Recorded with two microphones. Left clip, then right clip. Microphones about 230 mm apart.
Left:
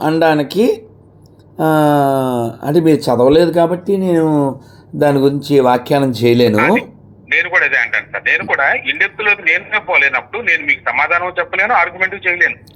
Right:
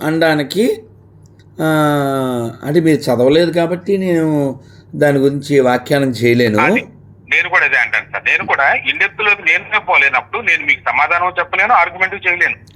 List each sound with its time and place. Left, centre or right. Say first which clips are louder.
0.2 s speech: even; centre
6.0 s speech: left 1 dB; left
7.3 s speech: right 1 dB; centre